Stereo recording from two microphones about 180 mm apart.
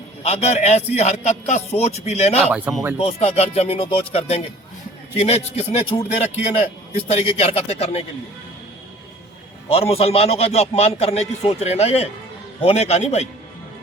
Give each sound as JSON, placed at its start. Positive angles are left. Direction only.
{"t": 0.2, "sound": "a man's voice", "side_deg": 35}
{"t": 2.4, "sound": "speech", "side_deg": -10}
{"t": 3.0, "sound": "a man's voice", "side_deg": 35}
{"t": 9.6, "sound": "a man's voice", "side_deg": 35}